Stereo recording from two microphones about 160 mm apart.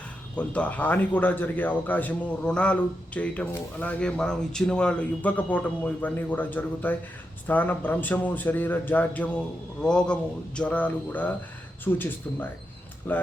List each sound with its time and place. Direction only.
0.3 s speech: 10° left (ahead or behind)